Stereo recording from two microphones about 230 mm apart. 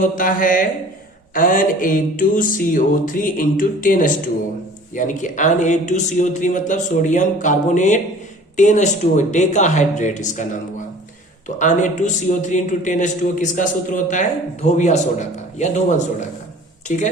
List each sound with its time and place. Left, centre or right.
0.0 s a man's voice: left
11.4 s a man's voice: left